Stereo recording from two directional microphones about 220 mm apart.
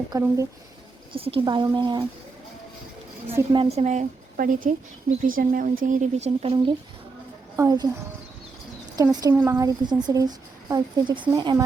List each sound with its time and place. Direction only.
0.1 s speech: 15° right (ahead or behind)
1.1 s a woman's voice: 25° right (ahead or behind)
3.5 s a woman's voice: 25° right (ahead or behind)
9.0 s speech: 10° right (ahead or behind)